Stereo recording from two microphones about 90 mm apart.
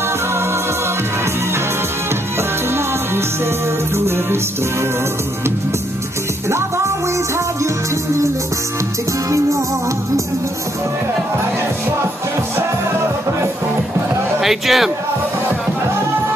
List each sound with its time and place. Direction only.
3.9 s music: 30° right (ahead or behind)
14.4 s a man's voice: 5° right (ahead or behind)